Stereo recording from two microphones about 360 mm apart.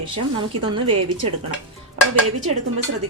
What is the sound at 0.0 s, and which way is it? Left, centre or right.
Speech, centre.